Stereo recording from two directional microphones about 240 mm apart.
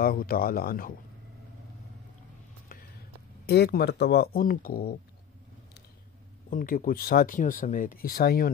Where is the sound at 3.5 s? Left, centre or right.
Left.